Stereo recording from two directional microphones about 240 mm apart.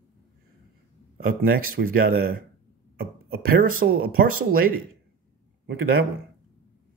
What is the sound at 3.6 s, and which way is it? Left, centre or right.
Speech, right.